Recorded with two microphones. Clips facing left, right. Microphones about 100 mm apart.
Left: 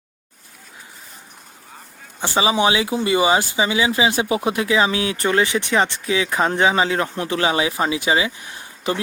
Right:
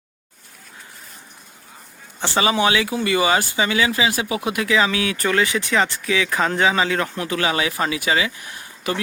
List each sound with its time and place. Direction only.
2.2 s speech: 15° left (ahead or behind)